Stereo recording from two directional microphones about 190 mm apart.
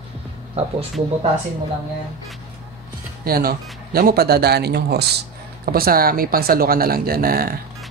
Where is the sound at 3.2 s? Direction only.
50° right (ahead or behind).